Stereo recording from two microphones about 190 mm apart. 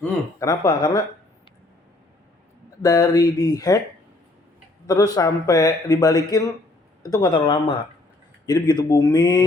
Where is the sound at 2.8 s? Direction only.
20° left (ahead or behind).